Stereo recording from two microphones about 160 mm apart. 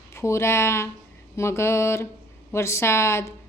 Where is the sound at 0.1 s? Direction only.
15° left (ahead or behind).